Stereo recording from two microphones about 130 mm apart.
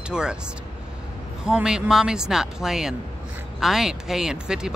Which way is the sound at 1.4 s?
5° right (ahead or behind).